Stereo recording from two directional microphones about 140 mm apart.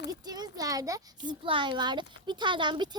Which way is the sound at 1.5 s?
35° right (ahead or behind).